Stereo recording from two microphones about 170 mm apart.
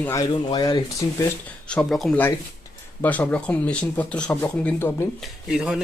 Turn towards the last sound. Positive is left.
turn(degrees=-5)  # may be behind; listen again after turning